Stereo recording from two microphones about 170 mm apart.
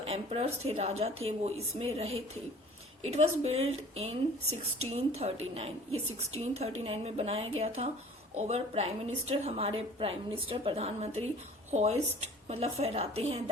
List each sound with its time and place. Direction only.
0.0 s speech: 40° right (ahead or behind)